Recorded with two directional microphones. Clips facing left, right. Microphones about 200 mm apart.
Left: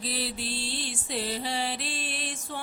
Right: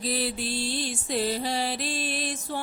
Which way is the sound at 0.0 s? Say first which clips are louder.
Right 5 dB; 50° right (ahead or behind).